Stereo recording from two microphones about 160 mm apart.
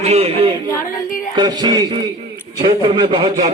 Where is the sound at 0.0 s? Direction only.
40° right (ahead or behind).